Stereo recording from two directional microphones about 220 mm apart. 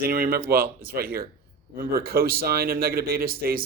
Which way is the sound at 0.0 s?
45° right (ahead or behind).